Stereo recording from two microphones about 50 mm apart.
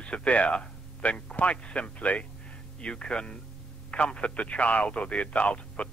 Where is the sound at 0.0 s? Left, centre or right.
Left.